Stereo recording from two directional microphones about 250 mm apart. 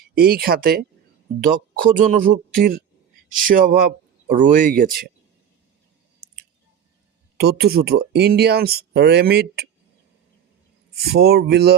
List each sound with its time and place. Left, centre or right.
0.1 s speech: right
7.3 s speech: right
10.9 s speech: right